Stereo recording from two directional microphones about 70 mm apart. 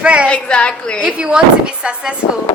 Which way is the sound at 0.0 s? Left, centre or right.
Centre.